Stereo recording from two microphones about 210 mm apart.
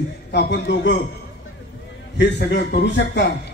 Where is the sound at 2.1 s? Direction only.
55° left (ahead or behind).